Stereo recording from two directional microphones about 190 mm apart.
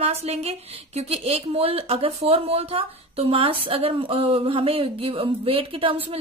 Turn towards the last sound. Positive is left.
turn(degrees=-30)  # may be behind; listen again after turning